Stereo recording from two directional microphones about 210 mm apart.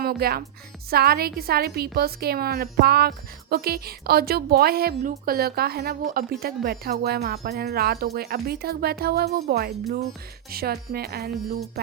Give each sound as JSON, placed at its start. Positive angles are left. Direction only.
{"t": 0.0, "sound": "a woman's voice", "side_deg": -45}